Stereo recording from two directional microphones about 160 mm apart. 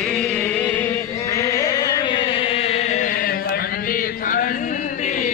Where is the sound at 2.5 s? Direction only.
40° left (ahead or behind).